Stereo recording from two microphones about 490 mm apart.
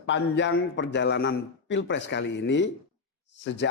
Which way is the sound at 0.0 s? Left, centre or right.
Left.